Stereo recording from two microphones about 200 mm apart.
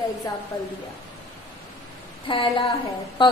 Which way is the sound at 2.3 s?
25° left (ahead or behind).